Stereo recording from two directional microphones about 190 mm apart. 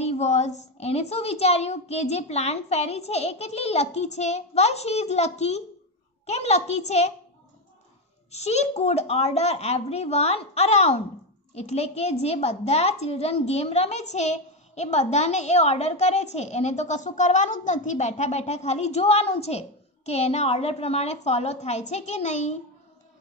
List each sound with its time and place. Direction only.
0.0 s a child's voice: 35° left (ahead or behind)
8.3 s a child's voice: 35° left (ahead or behind)